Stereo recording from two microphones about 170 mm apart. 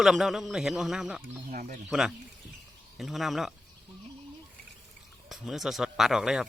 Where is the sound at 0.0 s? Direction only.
Centre (ahead or behind).